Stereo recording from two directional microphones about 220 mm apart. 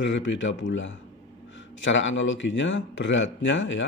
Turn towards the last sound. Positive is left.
turn(degrees=55)  # may be behind; listen again after turning